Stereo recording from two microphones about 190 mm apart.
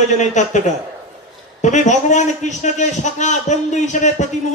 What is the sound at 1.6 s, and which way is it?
A man's voice, 40° left (ahead or behind).